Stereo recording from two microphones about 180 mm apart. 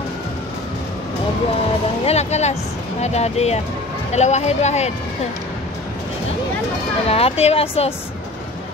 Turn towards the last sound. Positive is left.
turn(degrees=35)  # may be behind; listen again after turning